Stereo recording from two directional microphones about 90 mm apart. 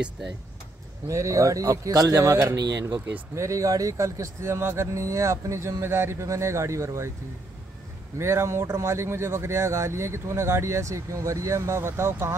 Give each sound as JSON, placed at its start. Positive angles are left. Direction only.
{"t": 1.0, "sound": "speech", "side_deg": -35}
{"t": 2.6, "sound": "speech", "side_deg": -55}
{"t": 3.3, "sound": "speech", "side_deg": -35}
{"t": 8.2, "sound": "speech", "side_deg": -30}